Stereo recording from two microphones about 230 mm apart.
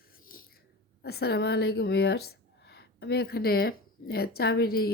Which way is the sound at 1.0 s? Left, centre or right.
Left.